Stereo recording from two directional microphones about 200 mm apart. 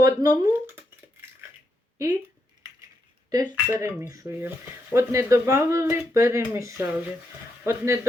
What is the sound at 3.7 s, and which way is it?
Speech, 15° right (ahead or behind).